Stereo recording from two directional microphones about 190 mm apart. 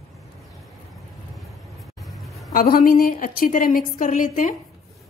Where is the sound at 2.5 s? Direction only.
50° left (ahead or behind).